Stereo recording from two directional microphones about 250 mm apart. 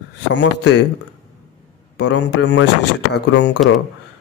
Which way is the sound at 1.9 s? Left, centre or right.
Left.